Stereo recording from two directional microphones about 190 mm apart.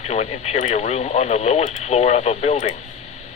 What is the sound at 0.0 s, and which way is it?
Speech, 35° left (ahead or behind).